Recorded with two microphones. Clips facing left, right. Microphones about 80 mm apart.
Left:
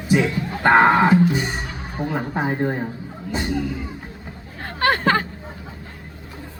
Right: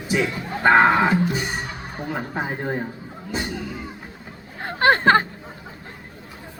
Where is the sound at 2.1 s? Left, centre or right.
Centre.